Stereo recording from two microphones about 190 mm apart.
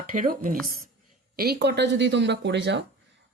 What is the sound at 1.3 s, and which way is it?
Speech, 60° right (ahead or behind).